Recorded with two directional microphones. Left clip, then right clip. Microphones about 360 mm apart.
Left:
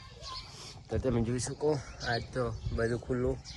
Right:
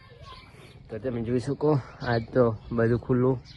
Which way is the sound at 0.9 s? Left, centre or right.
Centre.